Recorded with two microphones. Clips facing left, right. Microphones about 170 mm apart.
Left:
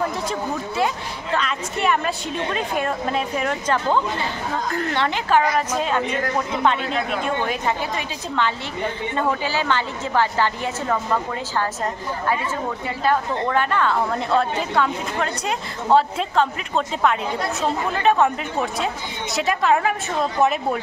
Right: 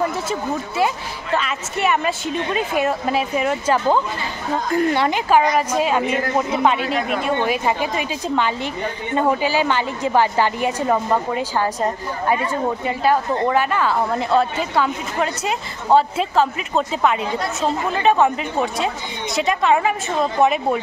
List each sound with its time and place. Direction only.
0.3 s a woman's voice: 5° right (ahead or behind)